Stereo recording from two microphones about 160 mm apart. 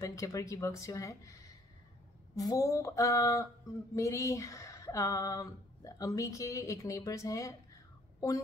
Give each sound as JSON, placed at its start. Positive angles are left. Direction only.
{"t": 0.0, "sound": "speech", "side_deg": 20}